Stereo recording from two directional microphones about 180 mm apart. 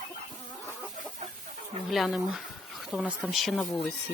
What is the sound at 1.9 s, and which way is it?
Speech, centre (ahead or behind).